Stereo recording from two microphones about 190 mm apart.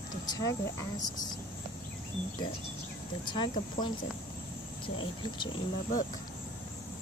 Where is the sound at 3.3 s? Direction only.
25° left (ahead or behind).